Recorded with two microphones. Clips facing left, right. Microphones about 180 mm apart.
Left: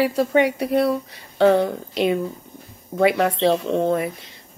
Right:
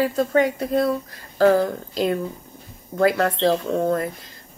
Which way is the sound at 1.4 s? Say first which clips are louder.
Left 1 dB; 25° left (ahead or behind).